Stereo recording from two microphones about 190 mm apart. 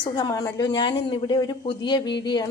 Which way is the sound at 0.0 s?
20° left (ahead or behind).